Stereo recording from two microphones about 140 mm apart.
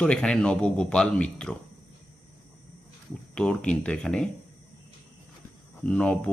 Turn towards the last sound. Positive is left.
turn(degrees=5)  # may be behind; listen again after turning